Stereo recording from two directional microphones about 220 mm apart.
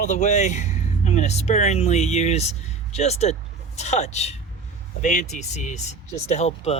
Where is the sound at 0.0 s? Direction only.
35° left (ahead or behind).